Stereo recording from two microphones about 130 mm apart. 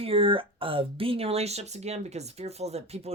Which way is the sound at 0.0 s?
45° right (ahead or behind).